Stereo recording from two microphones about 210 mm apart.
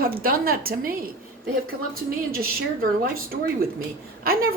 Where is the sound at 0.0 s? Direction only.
45° right (ahead or behind).